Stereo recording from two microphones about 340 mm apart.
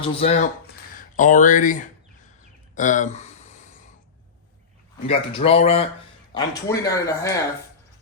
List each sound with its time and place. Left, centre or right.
0.0 s speech: centre
2.7 s a sound: left
5.0 s speech: centre